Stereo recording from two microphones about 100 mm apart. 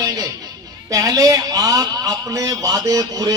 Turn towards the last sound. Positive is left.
turn(degrees=-35)  # may be behind; listen again after turning